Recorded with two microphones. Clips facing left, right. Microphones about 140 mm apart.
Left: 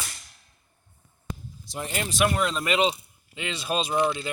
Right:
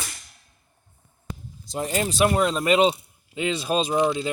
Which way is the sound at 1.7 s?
35° right (ahead or behind).